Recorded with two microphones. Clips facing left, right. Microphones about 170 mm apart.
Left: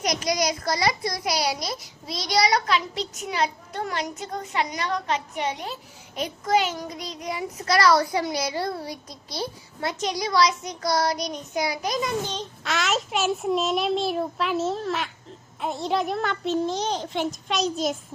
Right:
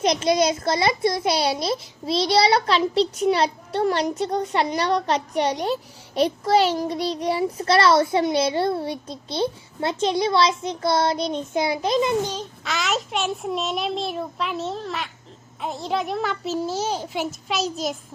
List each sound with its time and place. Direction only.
0.0 s a child's voice: 25° right (ahead or behind)
12.3 s a child's voice: 5° right (ahead or behind)